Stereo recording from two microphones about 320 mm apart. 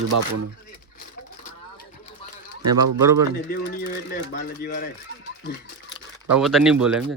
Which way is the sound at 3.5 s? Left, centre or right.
Left.